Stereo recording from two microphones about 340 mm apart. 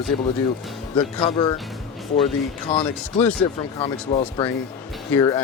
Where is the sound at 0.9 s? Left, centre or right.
Centre.